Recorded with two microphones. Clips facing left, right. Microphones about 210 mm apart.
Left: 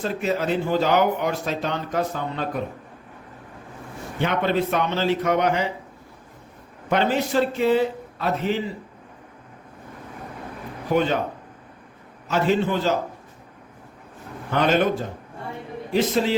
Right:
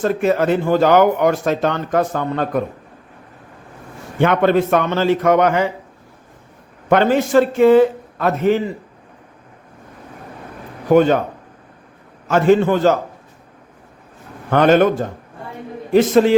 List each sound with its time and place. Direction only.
0.0 s speech: 50° right (ahead or behind)
4.2 s speech: 50° right (ahead or behind)
6.9 s speech: 50° right (ahead or behind)
10.8 s speech: 50° right (ahead or behind)
12.3 s speech: 50° right (ahead or behind)
14.5 s speech: 55° right (ahead or behind)